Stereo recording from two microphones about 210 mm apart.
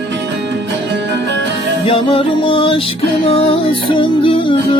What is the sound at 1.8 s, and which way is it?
Music, 25° left (ahead or behind).